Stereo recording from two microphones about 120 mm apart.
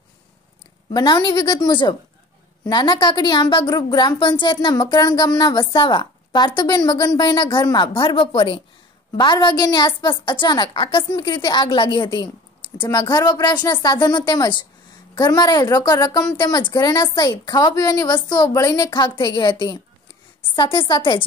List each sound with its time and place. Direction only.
0.9 s a woman's voice: 35° left (ahead or behind)